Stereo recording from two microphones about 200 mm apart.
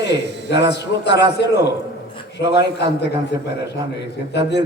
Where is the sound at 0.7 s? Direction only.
60° left (ahead or behind).